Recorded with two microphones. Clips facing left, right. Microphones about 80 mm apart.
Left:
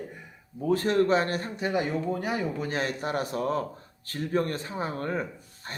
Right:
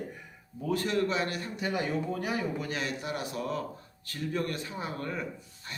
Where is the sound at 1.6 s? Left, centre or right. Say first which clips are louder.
Left 2 dB; centre.